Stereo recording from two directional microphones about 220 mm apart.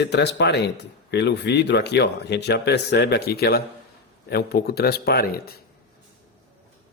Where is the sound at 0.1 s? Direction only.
50° left (ahead or behind).